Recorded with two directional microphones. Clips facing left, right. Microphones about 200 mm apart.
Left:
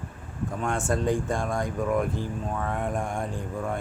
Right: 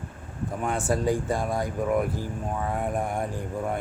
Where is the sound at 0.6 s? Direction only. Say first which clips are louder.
Right 1 dB; 5° right (ahead or behind).